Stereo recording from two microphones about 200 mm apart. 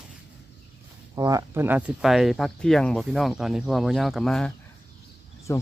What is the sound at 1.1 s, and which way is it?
Speech, 20° right (ahead or behind).